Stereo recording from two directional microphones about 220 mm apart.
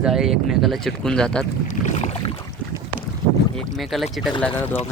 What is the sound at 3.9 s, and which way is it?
Speech, centre (ahead or behind).